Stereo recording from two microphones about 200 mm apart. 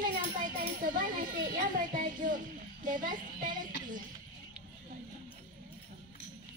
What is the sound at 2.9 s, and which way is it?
Child singing, 40° right (ahead or behind).